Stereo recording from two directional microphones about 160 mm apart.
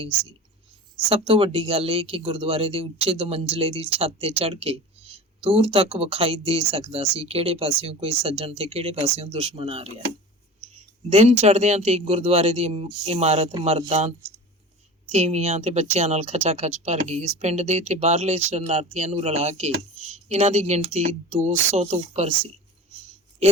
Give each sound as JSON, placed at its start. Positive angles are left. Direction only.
{"t": 1.1, "sound": "speech", "side_deg": -35}
{"t": 10.6, "sound": "a sound", "side_deg": -45}
{"t": 11.1, "sound": "speech", "side_deg": -40}
{"t": 15.1, "sound": "speech", "side_deg": -45}